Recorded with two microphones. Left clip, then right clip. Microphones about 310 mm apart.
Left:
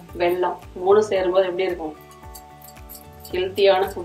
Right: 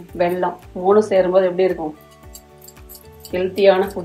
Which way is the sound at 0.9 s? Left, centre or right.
Centre.